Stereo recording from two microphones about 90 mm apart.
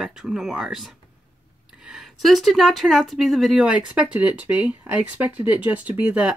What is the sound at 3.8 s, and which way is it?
Speech, 10° right (ahead or behind).